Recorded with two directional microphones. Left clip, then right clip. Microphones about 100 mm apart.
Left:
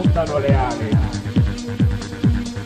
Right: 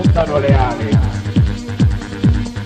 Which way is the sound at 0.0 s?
30° right (ahead or behind).